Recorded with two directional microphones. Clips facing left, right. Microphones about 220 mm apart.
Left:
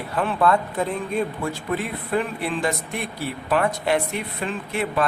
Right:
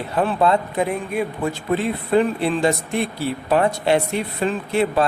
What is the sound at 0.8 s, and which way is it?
Speech, 10° right (ahead or behind).